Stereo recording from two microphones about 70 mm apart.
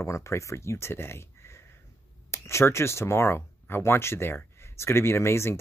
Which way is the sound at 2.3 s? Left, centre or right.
Left.